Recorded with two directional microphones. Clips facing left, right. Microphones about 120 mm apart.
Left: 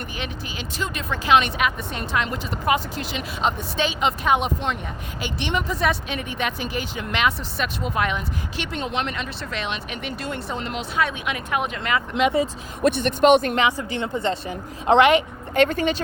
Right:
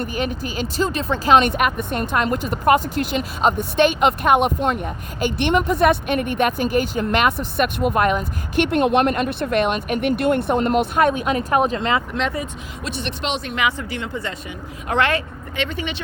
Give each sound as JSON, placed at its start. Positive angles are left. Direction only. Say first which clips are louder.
{"t": 0.0, "sound": "speech", "louder": "right 8 dB", "side_deg": -45}
{"t": 11.8, "sound": "speech", "louder": "right 3 dB", "side_deg": -25}
{"t": 12.8, "sound": "speech", "louder": "left 10 dB", "side_deg": 50}
{"t": 13.9, "sound": "speech", "louder": "left 3 dB", "side_deg": 25}
{"t": 15.5, "sound": "speech", "louder": "left 7 dB", "side_deg": 45}